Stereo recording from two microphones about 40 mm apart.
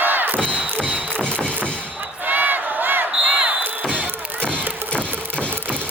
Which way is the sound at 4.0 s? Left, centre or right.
Right.